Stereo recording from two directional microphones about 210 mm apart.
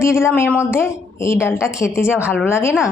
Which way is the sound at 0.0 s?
10° left (ahead or behind).